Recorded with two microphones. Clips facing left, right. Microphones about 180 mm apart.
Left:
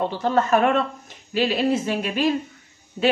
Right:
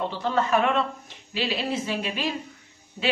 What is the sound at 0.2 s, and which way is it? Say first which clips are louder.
Speech: left 4 dB; 45° left (ahead or behind).